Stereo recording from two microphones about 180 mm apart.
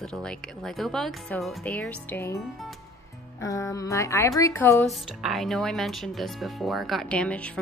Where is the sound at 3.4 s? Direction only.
15° left (ahead or behind).